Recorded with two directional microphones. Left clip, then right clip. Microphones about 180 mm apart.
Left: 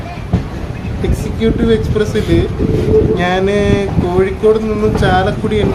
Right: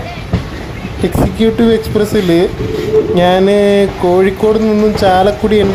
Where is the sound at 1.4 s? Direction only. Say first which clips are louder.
Right 2 dB; 40° right (ahead or behind).